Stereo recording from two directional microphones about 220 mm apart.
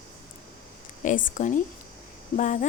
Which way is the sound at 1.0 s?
35° left (ahead or behind).